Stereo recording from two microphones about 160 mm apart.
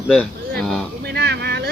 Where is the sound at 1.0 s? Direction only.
90° right.